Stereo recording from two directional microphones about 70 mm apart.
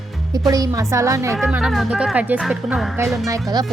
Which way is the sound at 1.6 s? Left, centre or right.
Centre.